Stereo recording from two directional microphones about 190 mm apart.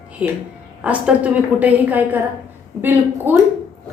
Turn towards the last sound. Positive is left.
turn(degrees=-10)  # may be behind; listen again after turning